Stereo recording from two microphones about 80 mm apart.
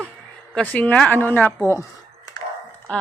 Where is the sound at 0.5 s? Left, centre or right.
Centre.